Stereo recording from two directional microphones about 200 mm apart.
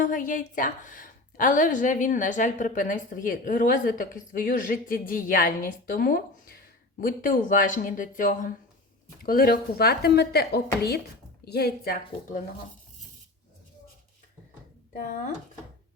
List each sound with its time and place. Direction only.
0.0 s a woman's voice: 40° left (ahead or behind)